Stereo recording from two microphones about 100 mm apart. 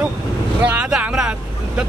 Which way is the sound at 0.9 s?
10° right (ahead or behind).